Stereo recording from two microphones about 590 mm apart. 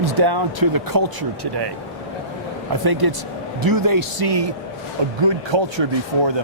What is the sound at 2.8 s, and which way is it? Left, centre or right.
Speech, right.